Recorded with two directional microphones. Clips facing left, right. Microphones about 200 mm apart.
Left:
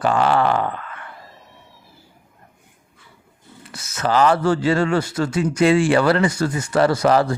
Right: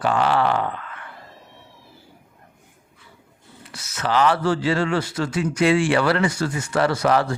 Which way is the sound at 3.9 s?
40° left (ahead or behind).